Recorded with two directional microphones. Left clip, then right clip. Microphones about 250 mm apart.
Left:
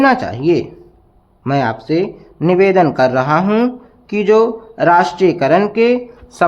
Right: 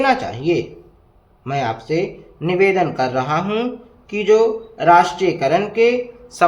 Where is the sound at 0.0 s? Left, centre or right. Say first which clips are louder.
Left 4 dB; left.